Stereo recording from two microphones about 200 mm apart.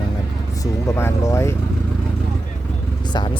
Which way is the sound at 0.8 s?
15° left (ahead or behind).